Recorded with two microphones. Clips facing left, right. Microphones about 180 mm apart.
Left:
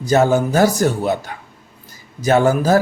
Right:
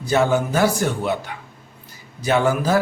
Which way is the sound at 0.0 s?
40° left (ahead or behind).